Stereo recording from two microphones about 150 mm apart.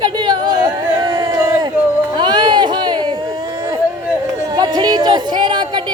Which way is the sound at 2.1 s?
30° right (ahead or behind).